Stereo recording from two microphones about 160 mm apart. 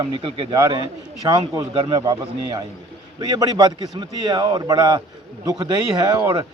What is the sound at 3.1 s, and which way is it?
Speech, 25° right (ahead or behind).